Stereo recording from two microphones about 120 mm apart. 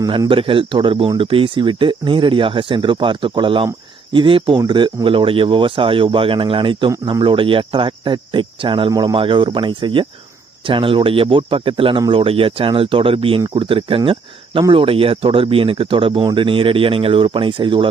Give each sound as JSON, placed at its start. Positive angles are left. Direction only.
{"t": 0.3, "sound": "speech", "side_deg": -45}
{"t": 4.6, "sound": "speech", "side_deg": -35}
{"t": 8.9, "sound": "speech", "side_deg": -30}
{"t": 9.1, "sound": "speech", "side_deg": -45}